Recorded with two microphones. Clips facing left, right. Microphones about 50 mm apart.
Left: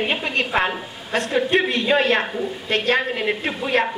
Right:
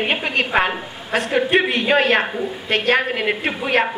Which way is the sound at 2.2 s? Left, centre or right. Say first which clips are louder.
Right 2 dB; centre.